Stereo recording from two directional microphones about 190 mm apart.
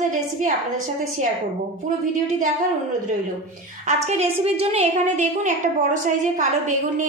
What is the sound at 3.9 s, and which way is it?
A woman's voice, 35° right (ahead or behind).